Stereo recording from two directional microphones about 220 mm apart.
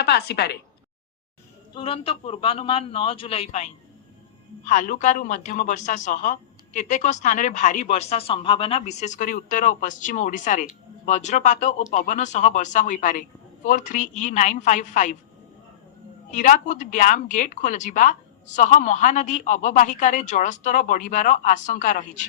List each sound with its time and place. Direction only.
0.0 s speech: 50° left (ahead or behind)
1.7 s a man's voice: 25° left (ahead or behind)
16.3 s speech: 35° left (ahead or behind)